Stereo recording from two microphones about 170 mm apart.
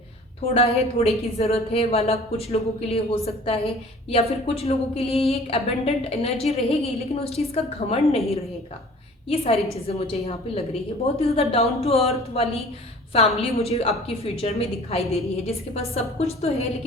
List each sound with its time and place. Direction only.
0.4 s a woman's voice: 40° left (ahead or behind)
9.3 s a woman's voice: 35° left (ahead or behind)